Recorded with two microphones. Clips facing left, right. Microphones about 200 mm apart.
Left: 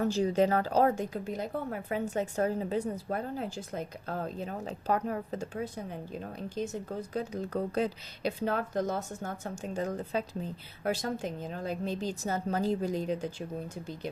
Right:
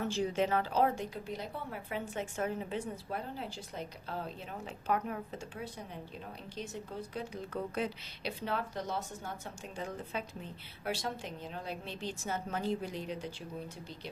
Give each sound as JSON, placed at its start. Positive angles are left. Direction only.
{"t": 0.0, "sound": "a woman's voice", "side_deg": 40}
{"t": 7.1, "sound": "a woman's voice", "side_deg": 40}